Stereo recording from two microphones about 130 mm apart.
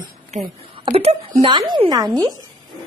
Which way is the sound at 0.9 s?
50° right (ahead or behind).